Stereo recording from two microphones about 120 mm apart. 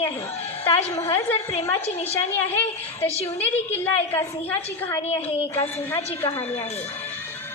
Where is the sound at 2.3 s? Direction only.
15° left (ahead or behind).